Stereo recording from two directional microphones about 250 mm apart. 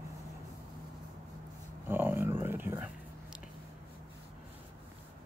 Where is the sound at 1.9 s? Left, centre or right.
Centre.